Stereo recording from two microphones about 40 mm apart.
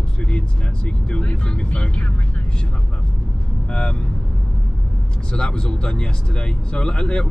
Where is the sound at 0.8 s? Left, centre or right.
Left.